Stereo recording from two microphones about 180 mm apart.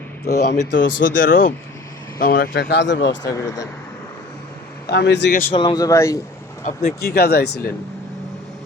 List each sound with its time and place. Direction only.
0.6 s speech: 75° left (ahead or behind)
1.0 s speech: 50° left (ahead or behind); by 3.2 s 80° left
3.2 s speech: 20° left (ahead or behind)
4.9 s speech: 70° left (ahead or behind)
5.5 s speech: 25° left (ahead or behind)
6.7 s speech: 55° left (ahead or behind)